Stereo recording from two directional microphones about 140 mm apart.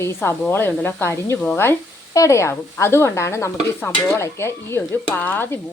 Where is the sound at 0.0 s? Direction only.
20° left (ahead or behind).